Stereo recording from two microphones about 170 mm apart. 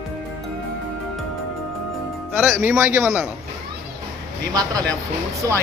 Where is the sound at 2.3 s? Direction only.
10° right (ahead or behind).